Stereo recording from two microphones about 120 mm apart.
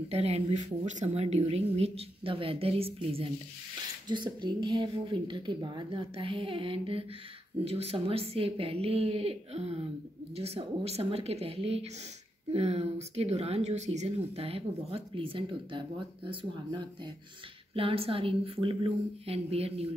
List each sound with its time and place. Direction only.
0.1 s speech: 60° right (ahead or behind)
4.1 s a woman's voice: 40° right (ahead or behind)
17.7 s a woman's voice: 50° right (ahead or behind)